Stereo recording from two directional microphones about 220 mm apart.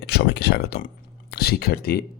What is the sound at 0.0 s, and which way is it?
Speech, 50° left (ahead or behind).